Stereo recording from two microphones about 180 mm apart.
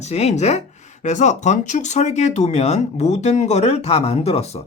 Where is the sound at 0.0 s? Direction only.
40° left (ahead or behind).